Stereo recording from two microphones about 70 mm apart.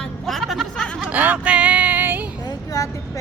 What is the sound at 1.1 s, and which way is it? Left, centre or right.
Speech, right.